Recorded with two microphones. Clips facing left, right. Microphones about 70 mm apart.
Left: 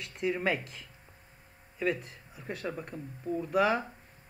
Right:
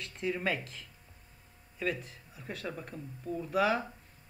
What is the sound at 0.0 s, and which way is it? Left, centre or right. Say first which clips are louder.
Speech: left 3 dB; centre.